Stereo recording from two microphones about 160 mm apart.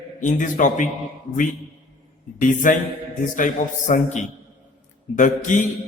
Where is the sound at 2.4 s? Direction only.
55° left (ahead or behind).